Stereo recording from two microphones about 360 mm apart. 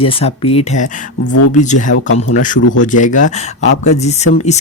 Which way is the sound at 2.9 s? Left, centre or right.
Left.